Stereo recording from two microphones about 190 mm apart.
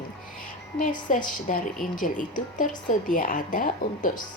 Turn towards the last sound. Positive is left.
turn(degrees=45)  # may be behind; listen again after turning